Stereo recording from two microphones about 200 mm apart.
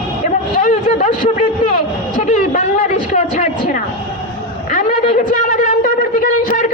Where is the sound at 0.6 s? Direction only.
40° left (ahead or behind).